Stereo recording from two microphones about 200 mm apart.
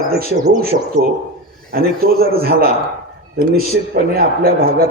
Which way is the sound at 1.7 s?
50° right (ahead or behind).